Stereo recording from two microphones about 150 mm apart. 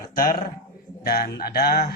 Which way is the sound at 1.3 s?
90° left.